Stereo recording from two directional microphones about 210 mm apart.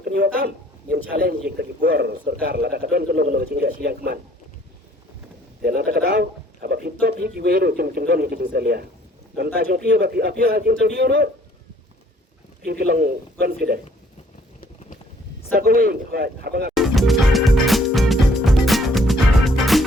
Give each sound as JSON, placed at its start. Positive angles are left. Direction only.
{"t": 0.0, "sound": "speech", "side_deg": -50}
{"t": 5.6, "sound": "a man's voice", "side_deg": -45}
{"t": 12.8, "sound": "speech", "side_deg": -45}
{"t": 15.5, "sound": "speech", "side_deg": -45}
{"t": 16.7, "sound": "music", "side_deg": 0}